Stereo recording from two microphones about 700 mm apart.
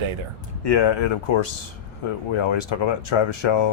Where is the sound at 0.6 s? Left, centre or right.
Left.